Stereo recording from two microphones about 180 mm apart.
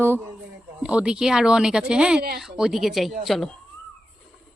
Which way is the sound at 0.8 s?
5° right (ahead or behind).